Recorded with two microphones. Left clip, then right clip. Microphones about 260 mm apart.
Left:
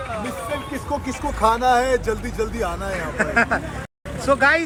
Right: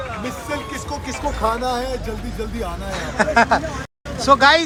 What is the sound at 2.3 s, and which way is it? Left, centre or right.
Speech, centre.